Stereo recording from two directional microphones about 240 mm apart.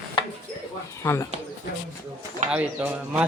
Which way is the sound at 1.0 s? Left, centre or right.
Centre.